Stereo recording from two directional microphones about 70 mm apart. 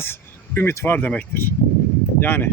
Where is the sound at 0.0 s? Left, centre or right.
Left.